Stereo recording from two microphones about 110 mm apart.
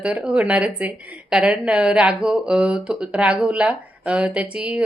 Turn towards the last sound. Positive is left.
turn(degrees=-10)  # may be behind; listen again after turning